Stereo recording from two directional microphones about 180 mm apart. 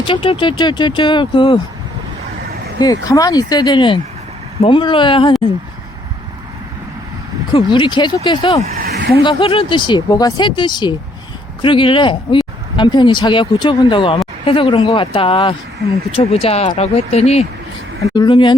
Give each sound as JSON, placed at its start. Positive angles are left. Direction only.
{"t": 0.0, "sound": "speech", "side_deg": 30}
{"t": 2.7, "sound": "speech", "side_deg": 20}
{"t": 7.5, "sound": "speech", "side_deg": 25}
{"t": 8.8, "sound": "a sound", "side_deg": -65}
{"t": 9.2, "sound": "speech", "side_deg": 30}
{"t": 18.1, "sound": "speech", "side_deg": 25}